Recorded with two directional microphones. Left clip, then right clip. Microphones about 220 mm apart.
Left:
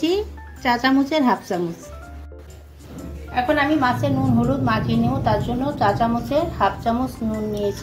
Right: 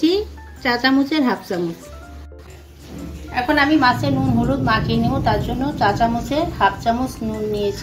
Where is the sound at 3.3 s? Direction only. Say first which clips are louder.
Right 2 dB; 20° left (ahead or behind).